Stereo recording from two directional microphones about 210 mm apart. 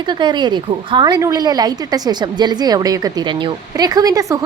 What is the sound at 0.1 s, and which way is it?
A woman's voice, 20° right (ahead or behind).